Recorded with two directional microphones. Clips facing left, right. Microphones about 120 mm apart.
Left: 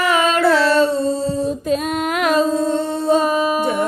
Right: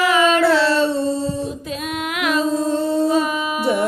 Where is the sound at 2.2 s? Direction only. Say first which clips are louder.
Left 4 dB; 40° left (ahead or behind).